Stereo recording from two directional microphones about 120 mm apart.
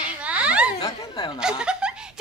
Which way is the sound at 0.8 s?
35° left (ahead or behind).